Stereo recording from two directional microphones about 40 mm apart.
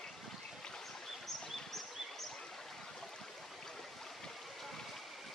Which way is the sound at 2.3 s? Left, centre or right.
Centre.